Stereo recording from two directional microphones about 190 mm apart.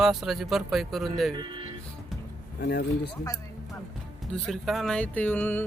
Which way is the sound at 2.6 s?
55° left (ahead or behind).